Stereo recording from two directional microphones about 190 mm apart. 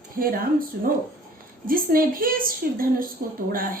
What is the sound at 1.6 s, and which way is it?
A woman's voice, 50° right (ahead or behind).